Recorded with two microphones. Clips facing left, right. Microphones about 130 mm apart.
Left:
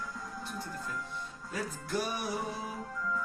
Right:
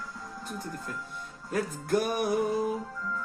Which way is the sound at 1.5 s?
55° right (ahead or behind).